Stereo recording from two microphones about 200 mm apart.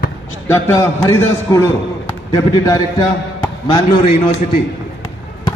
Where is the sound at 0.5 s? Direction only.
15° left (ahead or behind).